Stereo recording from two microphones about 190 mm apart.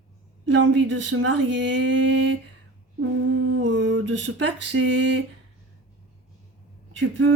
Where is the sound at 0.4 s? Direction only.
75° right (ahead or behind).